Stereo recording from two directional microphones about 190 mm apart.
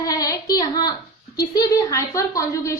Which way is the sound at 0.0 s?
20° left (ahead or behind).